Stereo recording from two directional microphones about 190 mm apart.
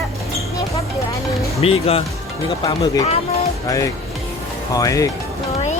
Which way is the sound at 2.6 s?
20° left (ahead or behind).